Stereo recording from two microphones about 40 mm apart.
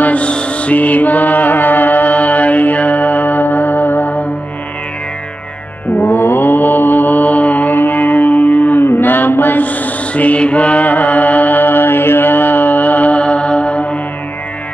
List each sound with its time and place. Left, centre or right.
0.0 s mantra: left
5.9 s mantra: left
8.8 s mantra: left